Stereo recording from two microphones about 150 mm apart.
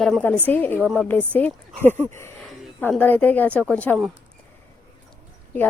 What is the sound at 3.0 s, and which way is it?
Speech, 10° left (ahead or behind).